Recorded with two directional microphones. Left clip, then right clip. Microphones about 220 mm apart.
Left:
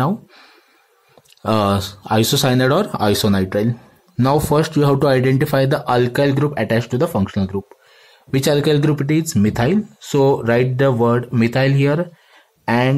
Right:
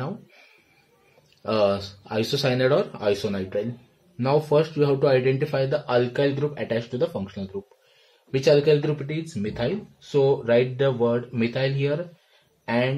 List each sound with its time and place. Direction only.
1.4 s speech: 45° left (ahead or behind)